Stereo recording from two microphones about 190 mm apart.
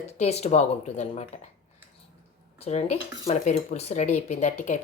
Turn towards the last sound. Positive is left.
turn(degrees=40)  # may be behind; listen again after turning